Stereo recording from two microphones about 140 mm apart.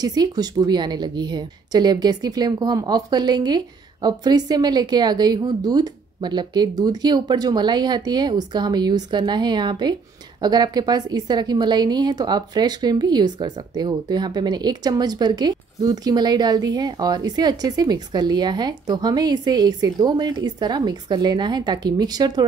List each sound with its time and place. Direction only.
0.0 s a woman's voice: 30° right (ahead or behind)